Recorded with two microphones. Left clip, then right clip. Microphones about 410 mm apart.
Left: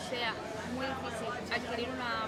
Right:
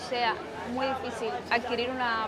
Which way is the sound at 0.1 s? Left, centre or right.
Centre.